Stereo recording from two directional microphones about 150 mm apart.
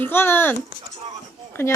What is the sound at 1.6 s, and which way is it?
Speech, 20° left (ahead or behind).